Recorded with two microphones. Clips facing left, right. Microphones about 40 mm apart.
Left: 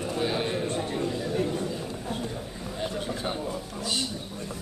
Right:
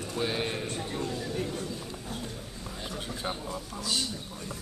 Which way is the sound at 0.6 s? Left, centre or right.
Centre.